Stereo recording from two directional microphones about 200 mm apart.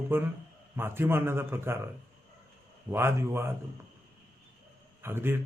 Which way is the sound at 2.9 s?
10° right (ahead or behind).